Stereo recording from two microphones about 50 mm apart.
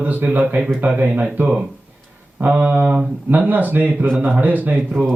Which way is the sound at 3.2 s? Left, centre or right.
Right.